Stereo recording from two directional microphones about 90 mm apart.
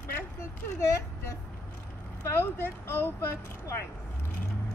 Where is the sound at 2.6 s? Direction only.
30° left (ahead or behind).